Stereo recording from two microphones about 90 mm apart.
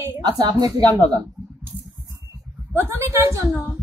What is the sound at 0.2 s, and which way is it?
Speech, 50° right (ahead or behind).